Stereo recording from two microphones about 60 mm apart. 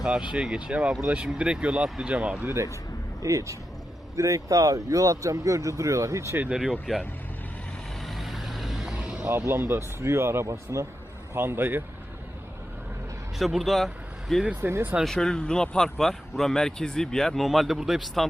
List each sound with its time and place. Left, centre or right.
0.0 s speech: centre
3.2 s speech: right
6.5 s speech: centre
8.0 s vehicle: centre
9.4 s speech: right
10.4 s speech: right
11.3 s a man's voice: right
13.4 s speech: centre
14.6 s a man's voice: right
15.0 s speech: centre